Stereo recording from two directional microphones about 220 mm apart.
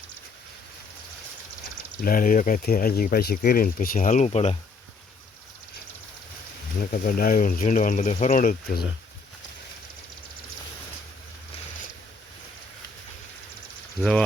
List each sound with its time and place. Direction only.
2.0 s speech: 40° left (ahead or behind)
6.9 s speech: 40° left (ahead or behind)